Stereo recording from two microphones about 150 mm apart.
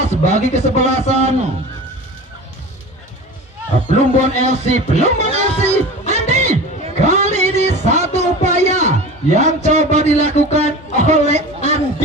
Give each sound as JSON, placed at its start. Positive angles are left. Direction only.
{"t": 0.0, "sound": "a man's voice", "side_deg": -50}
{"t": 4.2, "sound": "music", "side_deg": -50}